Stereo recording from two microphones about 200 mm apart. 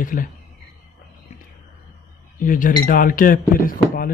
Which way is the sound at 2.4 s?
40° left (ahead or behind).